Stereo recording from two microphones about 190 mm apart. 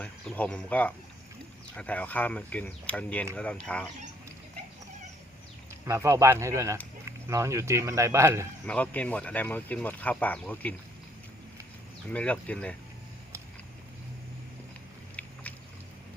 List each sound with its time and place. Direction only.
0.0 s speech: 5° left (ahead or behind)
5.8 s speech: 15° right (ahead or behind)
8.6 s speech: 5° left (ahead or behind)
12.1 s speech: 5° left (ahead or behind)
15.2 s boat: 5° left (ahead or behind)